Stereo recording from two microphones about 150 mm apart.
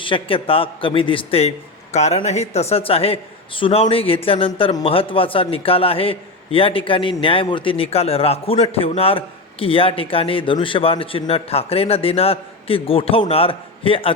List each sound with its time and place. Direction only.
0.0 s a man's voice: 35° left (ahead or behind)